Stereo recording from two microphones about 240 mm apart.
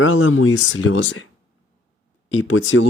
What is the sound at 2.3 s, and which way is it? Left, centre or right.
Speech, left.